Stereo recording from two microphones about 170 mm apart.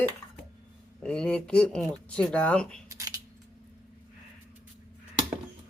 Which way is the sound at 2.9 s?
20° right (ahead or behind).